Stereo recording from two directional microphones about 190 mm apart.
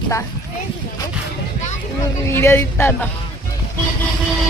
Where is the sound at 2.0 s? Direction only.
15° left (ahead or behind).